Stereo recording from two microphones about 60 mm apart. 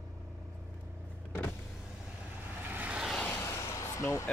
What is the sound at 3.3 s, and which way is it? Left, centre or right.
Vehicle, left.